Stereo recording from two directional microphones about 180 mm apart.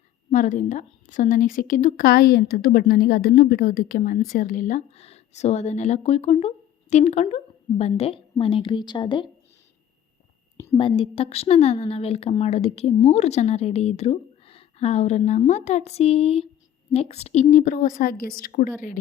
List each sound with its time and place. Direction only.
0.3 s a woman's voice: 45° left (ahead or behind); by 9.3 s 25° left (ahead or behind)
10.7 s a woman's voice: 30° left (ahead or behind); by 18.7 s 50° left (ahead or behind)